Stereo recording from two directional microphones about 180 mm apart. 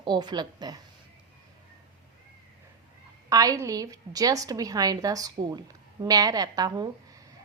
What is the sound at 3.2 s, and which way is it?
A woman's voice, 20° right (ahead or behind).